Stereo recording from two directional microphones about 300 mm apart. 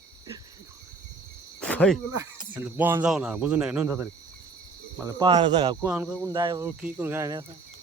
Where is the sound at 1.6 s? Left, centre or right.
Centre.